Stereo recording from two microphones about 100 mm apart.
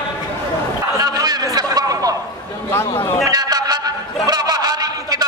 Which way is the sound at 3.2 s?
40° right (ahead or behind).